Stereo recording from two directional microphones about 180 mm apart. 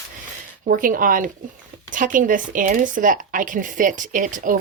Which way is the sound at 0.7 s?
50° right (ahead or behind).